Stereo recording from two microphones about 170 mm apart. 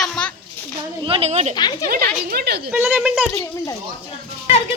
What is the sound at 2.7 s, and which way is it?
Speech, 10° right (ahead or behind).